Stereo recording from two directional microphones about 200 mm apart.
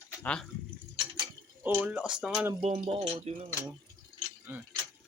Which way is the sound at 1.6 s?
10° right (ahead or behind).